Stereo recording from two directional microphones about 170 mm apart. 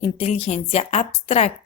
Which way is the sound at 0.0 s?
35° left (ahead or behind).